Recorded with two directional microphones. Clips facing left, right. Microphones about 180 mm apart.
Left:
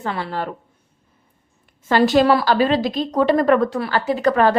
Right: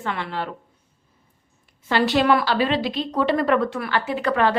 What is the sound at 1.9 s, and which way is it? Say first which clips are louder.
A woman's voice: left 4 dB; 45° left (ahead or behind).